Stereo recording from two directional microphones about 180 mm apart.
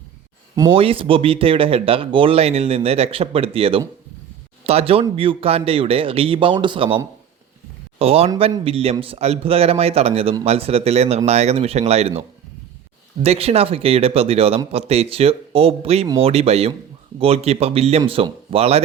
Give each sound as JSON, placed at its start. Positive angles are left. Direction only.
{"t": 0.7, "sound": "speech", "side_deg": -30}
{"t": 13.2, "sound": "speech", "side_deg": -35}